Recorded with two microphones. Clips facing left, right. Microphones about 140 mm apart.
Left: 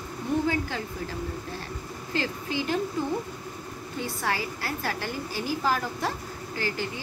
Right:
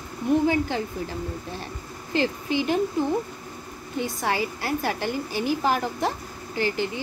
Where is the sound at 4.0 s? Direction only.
20° right (ahead or behind).